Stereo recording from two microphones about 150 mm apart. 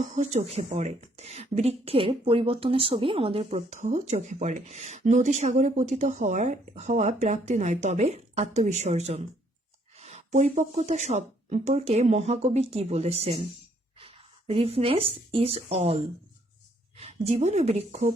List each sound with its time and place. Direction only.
0.0 s speech: 50° right (ahead or behind)